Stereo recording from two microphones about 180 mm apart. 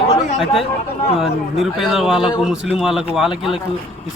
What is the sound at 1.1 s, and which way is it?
A man's voice, centre (ahead or behind).